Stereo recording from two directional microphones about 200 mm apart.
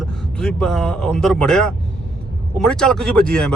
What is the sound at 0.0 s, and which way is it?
Speech, 5° left (ahead or behind).